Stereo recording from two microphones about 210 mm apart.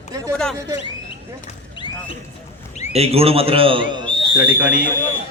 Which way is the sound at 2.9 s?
30° right (ahead or behind).